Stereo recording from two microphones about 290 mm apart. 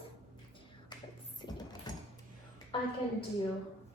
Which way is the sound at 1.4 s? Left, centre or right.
Centre.